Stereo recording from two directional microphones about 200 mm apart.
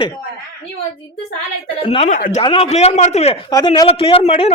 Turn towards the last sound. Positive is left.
turn(degrees=30)  # may be behind; listen again after turning